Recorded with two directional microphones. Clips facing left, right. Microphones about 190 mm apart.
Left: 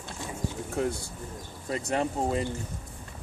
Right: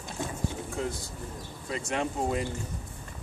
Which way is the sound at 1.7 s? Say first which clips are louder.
Left 3 dB; 40° left (ahead or behind).